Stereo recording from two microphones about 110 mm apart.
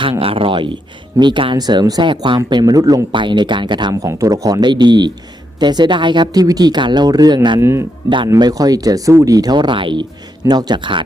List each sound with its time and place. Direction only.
0.0 s speech: 55° right (ahead or behind)
1.5 s speech: 40° right (ahead or behind)
3.1 s speech: 45° right (ahead or behind)
4.0 s speech: 30° right (ahead or behind)
7.6 s speech: 25° right (ahead or behind)
8.4 s speech: 35° right (ahead or behind)
10.4 s speech: 35° right (ahead or behind)